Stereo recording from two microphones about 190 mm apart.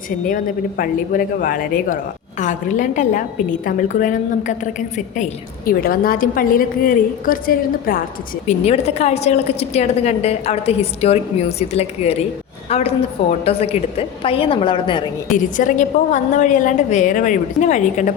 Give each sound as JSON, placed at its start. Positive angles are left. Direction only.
{"t": 0.3, "sound": "a woman's voice", "side_deg": 45}
{"t": 8.4, "sound": "a woman's voice", "side_deg": 35}
{"t": 15.3, "sound": "a woman's voice", "side_deg": 40}